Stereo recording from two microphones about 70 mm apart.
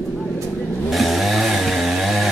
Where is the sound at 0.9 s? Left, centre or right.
Centre.